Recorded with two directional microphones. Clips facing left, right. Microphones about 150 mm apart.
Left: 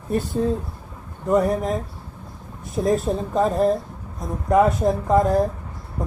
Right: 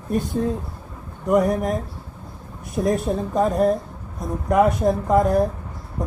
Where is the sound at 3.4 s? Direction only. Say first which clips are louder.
Even; 25° left (ahead or behind).